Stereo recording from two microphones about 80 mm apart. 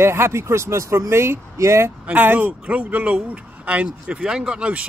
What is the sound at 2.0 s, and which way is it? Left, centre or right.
A man's voice, right.